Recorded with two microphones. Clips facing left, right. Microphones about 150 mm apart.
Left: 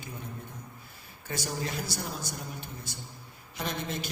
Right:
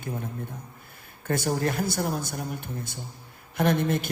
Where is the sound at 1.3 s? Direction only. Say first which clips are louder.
Right 9 dB; 55° right (ahead or behind).